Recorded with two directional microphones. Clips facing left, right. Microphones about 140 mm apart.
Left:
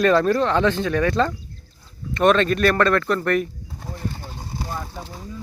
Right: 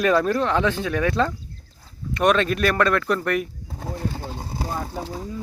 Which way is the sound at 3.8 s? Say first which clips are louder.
Right 3 dB; 40° right (ahead or behind).